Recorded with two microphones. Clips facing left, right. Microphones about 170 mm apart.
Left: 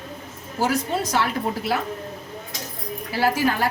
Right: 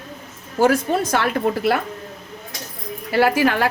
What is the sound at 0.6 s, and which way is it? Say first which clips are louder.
A woman's voice: right 6 dB; 55° right (ahead or behind).